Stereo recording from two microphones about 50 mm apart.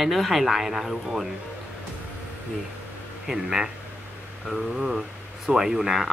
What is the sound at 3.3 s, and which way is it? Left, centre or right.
Speech, centre.